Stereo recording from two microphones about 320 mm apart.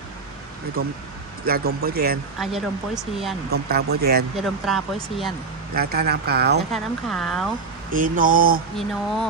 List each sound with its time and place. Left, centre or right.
1.5 s speech: right
2.4 s speech: centre
3.5 s speech: right
4.4 s speech: centre
5.7 s speech: right
6.7 s speech: centre
7.9 s speech: right
8.7 s speech: centre